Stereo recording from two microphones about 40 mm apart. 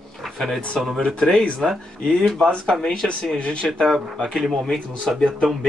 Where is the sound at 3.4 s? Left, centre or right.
Left.